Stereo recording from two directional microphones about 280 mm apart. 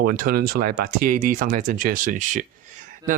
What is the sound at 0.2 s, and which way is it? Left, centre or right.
Speech, right.